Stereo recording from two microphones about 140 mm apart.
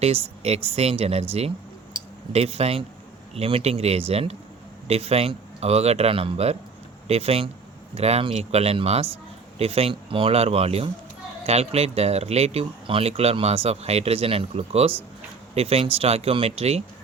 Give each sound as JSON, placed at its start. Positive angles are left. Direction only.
{"t": 0.0, "sound": "speech", "side_deg": -45}
{"t": 1.3, "sound": "a sound", "side_deg": -45}
{"t": 3.3, "sound": "speech", "side_deg": -45}